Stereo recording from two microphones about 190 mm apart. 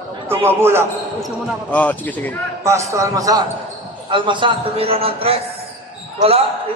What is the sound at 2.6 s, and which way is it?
A man's voice, 15° right (ahead or behind).